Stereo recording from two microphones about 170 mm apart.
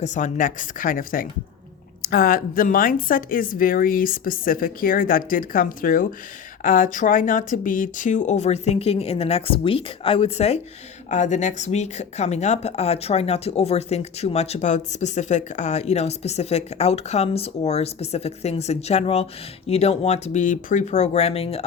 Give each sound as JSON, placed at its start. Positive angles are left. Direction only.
{"t": 0.0, "sound": "a woman's voice", "side_deg": 45}